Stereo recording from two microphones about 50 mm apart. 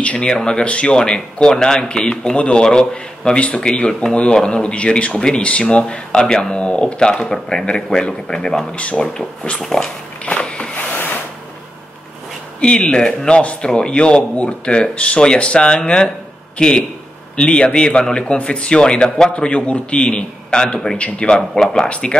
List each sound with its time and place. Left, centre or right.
0.0 s speech: left
0.3 s speech: centre
8.7 s speech: left
9.6 s speech: centre
10.4 s a sound: centre
12.5 s a man's voice: left
21.4 s speech: centre
21.8 s speech: left